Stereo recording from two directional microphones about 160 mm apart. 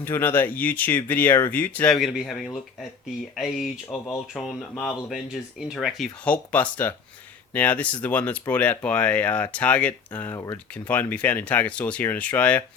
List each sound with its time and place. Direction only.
0.0 s speech: 15° left (ahead or behind)
2.0 s speech: centre (ahead or behind)
10.3 s speech: 20° left (ahead or behind)
10.8 s speech: 10° left (ahead or behind)